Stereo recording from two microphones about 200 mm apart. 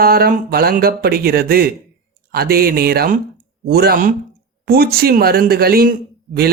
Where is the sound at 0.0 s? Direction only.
50° right (ahead or behind).